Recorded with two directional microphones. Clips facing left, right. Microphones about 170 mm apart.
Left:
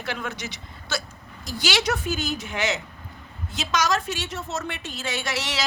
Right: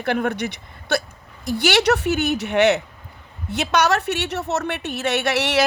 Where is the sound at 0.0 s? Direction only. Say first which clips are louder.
Right 10 dB; 55° right (ahead or behind).